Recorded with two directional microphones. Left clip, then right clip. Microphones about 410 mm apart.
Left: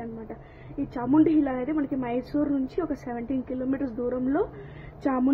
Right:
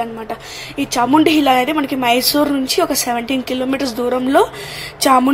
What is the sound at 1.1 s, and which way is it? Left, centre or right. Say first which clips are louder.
A woman's voice: right 10 dB; centre.